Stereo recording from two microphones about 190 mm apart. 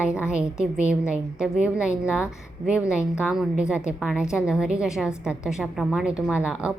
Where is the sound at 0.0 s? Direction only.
5° right (ahead or behind).